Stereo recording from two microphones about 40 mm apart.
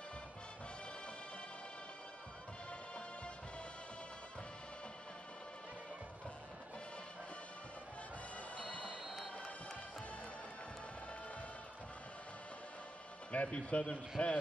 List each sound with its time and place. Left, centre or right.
8.5 s music: left
13.3 s speech: left